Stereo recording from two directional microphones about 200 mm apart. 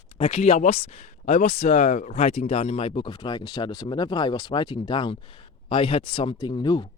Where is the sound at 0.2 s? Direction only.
35° left (ahead or behind).